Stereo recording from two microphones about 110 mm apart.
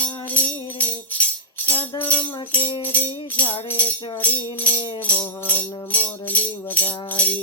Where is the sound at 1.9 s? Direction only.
15° left (ahead or behind).